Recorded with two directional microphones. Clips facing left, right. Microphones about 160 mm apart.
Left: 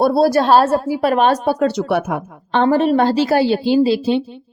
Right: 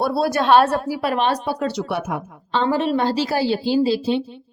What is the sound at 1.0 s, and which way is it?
Speech, 45° left (ahead or behind).